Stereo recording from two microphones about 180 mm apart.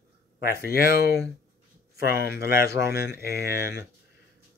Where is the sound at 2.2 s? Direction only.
60° left (ahead or behind).